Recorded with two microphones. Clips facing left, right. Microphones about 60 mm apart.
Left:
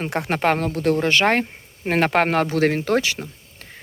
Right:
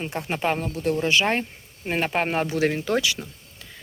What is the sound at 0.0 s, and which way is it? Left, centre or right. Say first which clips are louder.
Speech: left 5 dB; left.